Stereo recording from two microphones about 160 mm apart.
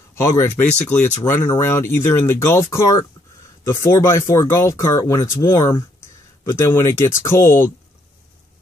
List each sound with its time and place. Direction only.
0.1 s speech: 15° left (ahead or behind)